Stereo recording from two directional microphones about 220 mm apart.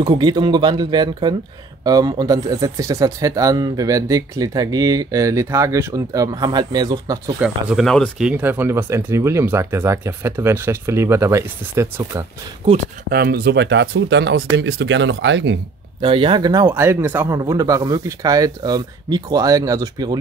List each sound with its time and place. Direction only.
0.0 s speech: 20° right (ahead or behind)
7.3 s speech: 5° right (ahead or behind)
13.1 s speech: 45° right (ahead or behind)
16.0 s speech: 25° right (ahead or behind)